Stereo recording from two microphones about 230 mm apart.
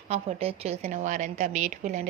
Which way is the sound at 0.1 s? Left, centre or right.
Right.